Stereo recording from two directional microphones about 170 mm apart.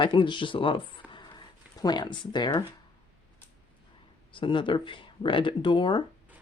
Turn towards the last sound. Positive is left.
turn(degrees=30)  # may be behind; listen again after turning